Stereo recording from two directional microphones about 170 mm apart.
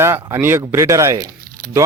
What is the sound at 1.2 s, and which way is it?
Music, 60° right (ahead or behind).